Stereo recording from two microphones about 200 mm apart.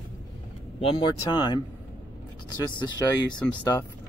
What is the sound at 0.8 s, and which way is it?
Speech, 25° left (ahead or behind).